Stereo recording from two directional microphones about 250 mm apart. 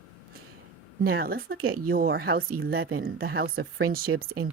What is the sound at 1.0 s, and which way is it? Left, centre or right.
Speech, right.